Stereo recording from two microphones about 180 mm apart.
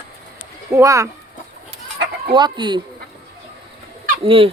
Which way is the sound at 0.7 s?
15° right (ahead or behind).